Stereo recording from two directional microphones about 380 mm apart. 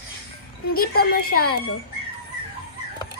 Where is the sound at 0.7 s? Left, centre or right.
Left.